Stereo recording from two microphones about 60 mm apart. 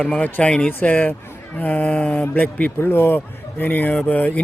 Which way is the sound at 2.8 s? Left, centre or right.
Left.